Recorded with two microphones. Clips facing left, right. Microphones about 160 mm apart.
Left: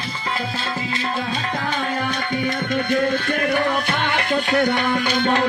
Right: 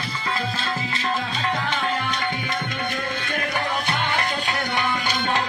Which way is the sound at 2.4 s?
50° left (ahead or behind).